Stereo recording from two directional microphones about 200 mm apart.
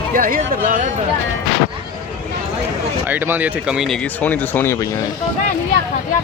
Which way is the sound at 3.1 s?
10° right (ahead or behind).